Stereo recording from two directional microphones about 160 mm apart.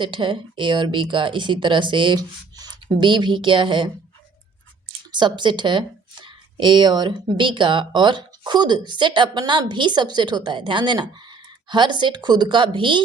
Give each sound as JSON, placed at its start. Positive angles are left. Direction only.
{"t": 0.0, "sound": "speech", "side_deg": -30}
{"t": 5.1, "sound": "speech", "side_deg": -30}